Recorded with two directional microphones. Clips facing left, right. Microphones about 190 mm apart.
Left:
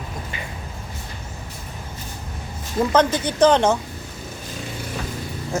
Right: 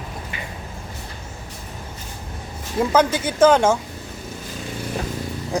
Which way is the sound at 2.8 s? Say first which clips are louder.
Even; 10° right (ahead or behind).